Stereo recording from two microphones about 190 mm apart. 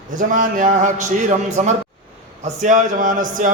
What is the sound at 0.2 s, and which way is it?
Speech, 45° right (ahead or behind).